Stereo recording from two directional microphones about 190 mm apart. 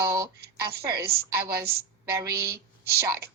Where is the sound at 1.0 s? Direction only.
55° right (ahead or behind).